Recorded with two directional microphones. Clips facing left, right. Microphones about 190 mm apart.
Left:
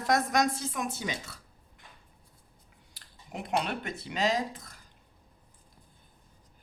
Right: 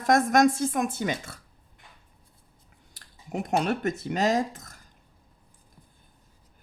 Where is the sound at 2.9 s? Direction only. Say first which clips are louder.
Right 8 dB; 45° right (ahead or behind).